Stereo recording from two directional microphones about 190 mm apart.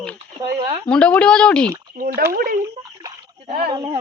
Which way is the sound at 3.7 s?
20° right (ahead or behind).